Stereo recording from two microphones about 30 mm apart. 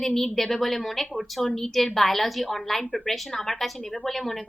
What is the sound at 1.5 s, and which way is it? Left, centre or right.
Speech, centre.